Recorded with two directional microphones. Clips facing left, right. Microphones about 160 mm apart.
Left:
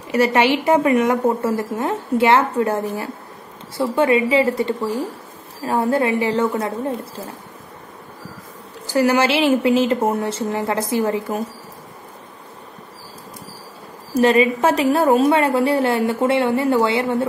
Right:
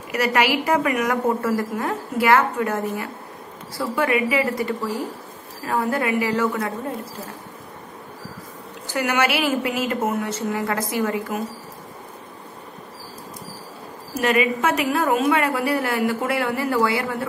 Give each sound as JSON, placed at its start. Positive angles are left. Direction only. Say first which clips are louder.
{"t": 0.1, "sound": "a woman's voice", "louder": "left 4 dB", "side_deg": 25}
{"t": 8.8, "sound": "a woman's voice", "louder": "left 6 dB", "side_deg": 35}
{"t": 14.1, "sound": "a woman's voice", "louder": "left 5 dB", "side_deg": 30}